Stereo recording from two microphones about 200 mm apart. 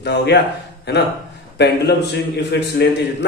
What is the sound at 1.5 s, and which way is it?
Speech, 55° left (ahead or behind).